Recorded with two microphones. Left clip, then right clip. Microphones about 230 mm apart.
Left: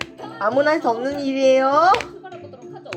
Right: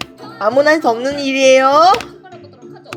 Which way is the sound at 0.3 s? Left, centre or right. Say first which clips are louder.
Right 6 dB; right.